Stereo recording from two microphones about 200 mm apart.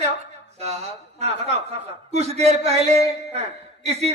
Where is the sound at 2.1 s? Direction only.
35° right (ahead or behind).